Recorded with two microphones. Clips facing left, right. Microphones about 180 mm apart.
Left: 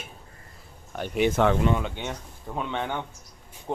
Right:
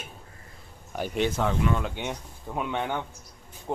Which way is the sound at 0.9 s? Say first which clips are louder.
Right 1 dB; 5° right (ahead or behind).